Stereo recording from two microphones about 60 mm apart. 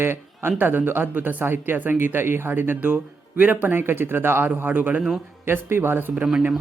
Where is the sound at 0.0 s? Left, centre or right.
Right.